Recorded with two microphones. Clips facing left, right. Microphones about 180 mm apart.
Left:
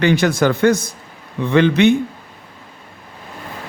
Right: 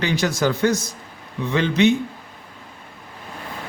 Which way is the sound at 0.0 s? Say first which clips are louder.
Left 6 dB; 55° left (ahead or behind).